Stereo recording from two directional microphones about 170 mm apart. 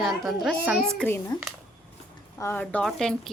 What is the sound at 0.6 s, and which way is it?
Speech, 10° right (ahead or behind).